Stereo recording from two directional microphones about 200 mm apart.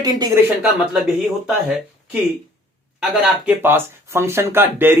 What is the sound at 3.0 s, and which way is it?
Speech, 10° right (ahead or behind).